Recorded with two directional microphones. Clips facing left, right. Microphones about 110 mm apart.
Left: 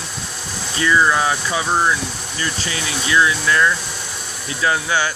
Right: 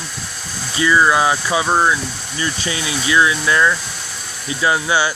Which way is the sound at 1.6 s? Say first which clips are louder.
Right 1 dB; 25° right (ahead or behind).